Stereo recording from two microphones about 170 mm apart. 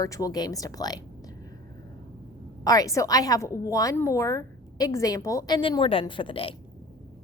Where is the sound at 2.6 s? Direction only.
20° left (ahead or behind).